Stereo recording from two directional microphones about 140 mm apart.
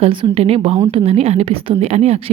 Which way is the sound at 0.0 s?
40° right (ahead or behind).